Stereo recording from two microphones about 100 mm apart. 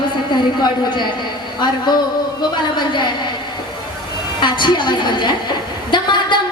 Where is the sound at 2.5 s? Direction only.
50° left (ahead or behind).